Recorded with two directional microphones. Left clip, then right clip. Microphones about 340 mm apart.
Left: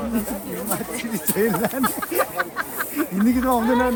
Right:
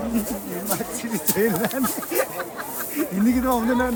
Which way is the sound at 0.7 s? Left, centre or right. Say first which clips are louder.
Even; centre.